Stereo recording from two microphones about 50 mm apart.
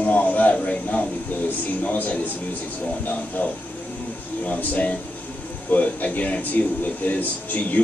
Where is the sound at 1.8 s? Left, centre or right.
Left.